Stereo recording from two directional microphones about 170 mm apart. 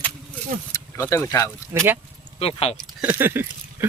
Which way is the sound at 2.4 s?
35° left (ahead or behind).